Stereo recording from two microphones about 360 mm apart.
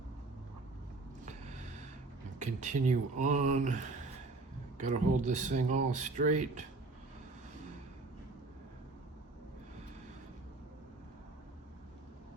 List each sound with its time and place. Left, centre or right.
2.4 s speech: centre
4.8 s speech: centre